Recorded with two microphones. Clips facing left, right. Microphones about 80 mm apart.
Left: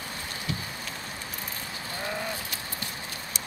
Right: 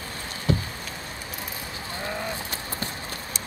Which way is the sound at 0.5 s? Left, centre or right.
Right.